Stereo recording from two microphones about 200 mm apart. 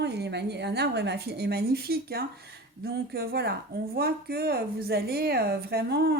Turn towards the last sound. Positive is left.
turn(degrees=-55)  # may be behind; listen again after turning